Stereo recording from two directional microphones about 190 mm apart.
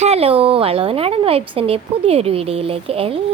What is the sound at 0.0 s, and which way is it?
A woman's voice, 30° right (ahead or behind).